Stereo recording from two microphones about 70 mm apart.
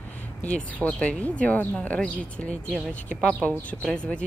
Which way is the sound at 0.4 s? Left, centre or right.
Centre.